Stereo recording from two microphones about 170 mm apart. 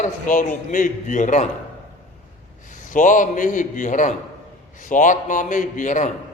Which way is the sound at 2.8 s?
50° left (ahead or behind).